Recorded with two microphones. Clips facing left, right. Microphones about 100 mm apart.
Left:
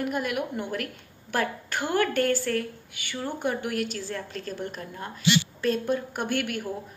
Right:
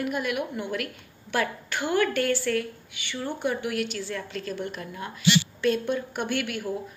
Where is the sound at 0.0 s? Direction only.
40° left (ahead or behind).